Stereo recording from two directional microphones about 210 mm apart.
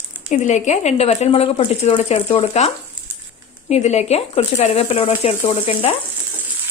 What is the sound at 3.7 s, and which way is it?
Speech, 30° left (ahead or behind).